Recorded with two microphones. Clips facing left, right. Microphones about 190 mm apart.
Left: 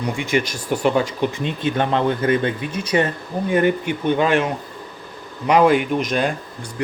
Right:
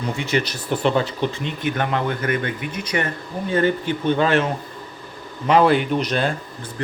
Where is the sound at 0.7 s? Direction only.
10° left (ahead or behind).